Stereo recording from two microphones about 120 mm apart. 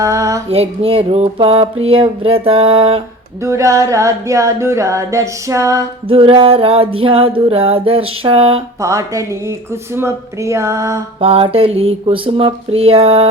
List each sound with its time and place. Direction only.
0.0 s female singing: 25° right (ahead or behind)
0.5 s music: 55° right (ahead or behind)
3.4 s music: 25° right (ahead or behind)
6.1 s music: 50° right (ahead or behind)
8.8 s music: 25° right (ahead or behind)
11.2 s music: 50° right (ahead or behind)